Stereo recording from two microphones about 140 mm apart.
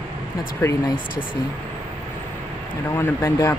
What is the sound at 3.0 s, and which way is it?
Speech, 20° left (ahead or behind).